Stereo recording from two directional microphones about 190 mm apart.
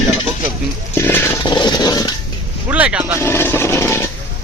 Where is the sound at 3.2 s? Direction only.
10° left (ahead or behind).